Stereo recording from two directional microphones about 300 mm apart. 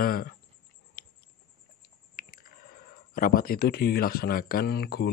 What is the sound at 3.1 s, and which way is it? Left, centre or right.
Speech, left.